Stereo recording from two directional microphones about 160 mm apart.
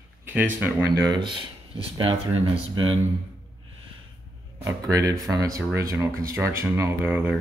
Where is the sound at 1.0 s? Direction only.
30° right (ahead or behind).